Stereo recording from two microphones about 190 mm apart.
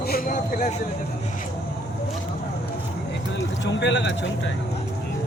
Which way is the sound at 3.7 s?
70° left (ahead or behind).